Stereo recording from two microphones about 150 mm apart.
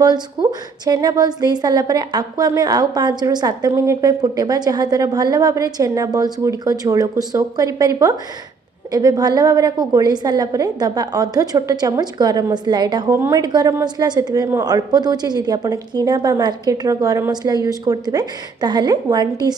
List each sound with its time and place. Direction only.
0.0 s a woman's voice: 30° right (ahead or behind)